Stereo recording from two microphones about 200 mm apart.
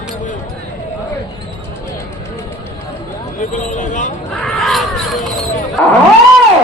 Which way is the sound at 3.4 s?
40° left (ahead or behind).